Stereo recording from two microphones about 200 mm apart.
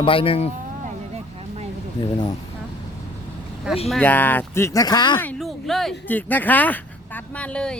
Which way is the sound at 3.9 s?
5° left (ahead or behind).